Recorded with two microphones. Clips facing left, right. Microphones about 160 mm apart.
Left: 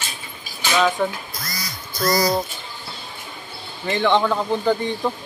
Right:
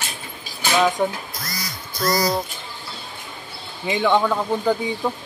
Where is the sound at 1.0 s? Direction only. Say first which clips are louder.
Right 1 dB; 15° right (ahead or behind).